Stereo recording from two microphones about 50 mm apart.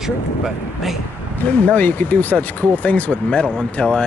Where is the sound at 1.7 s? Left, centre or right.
Left.